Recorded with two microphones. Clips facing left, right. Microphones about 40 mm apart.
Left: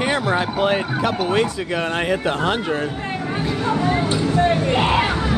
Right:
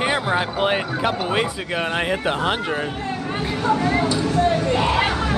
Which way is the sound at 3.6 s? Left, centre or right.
Left.